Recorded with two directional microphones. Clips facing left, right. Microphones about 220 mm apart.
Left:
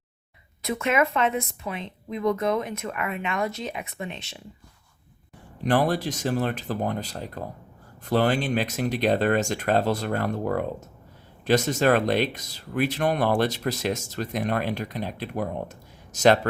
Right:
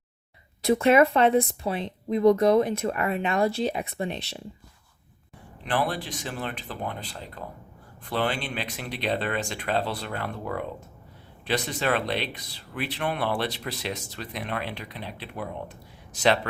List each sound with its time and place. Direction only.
0.6 s speech: 35° right (ahead or behind)
5.6 s speech: 40° left (ahead or behind)